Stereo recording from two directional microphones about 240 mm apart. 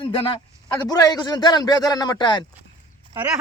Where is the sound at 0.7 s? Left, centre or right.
Centre.